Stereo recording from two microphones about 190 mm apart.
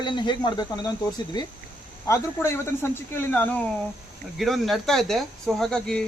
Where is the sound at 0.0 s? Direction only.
25° left (ahead or behind).